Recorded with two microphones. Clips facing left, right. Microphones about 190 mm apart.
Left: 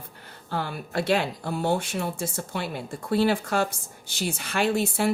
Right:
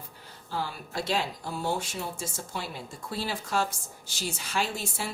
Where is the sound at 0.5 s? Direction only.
60° left (ahead or behind).